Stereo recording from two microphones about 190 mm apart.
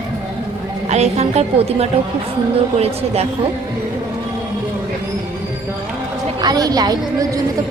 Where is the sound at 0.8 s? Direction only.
35° right (ahead or behind).